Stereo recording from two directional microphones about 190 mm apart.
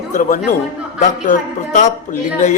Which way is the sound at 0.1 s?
40° left (ahead or behind).